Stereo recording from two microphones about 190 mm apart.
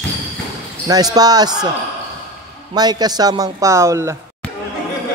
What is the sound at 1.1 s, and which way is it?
Speech, 20° right (ahead or behind).